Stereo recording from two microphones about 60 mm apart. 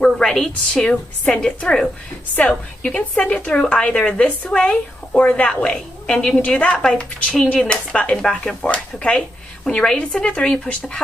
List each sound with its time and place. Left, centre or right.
0.0 s speech: centre
2.3 s speech: left